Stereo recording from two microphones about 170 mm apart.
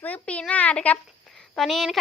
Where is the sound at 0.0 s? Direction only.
10° left (ahead or behind).